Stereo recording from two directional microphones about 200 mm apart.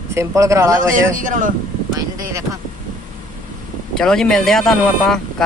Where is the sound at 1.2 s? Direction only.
40° right (ahead or behind).